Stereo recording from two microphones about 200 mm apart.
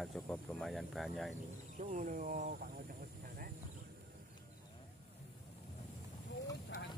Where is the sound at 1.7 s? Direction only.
40° right (ahead or behind).